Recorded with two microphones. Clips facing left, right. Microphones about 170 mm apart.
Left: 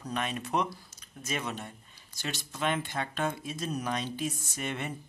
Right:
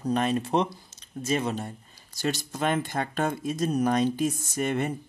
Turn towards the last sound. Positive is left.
turn(degrees=-45)  # may be behind; listen again after turning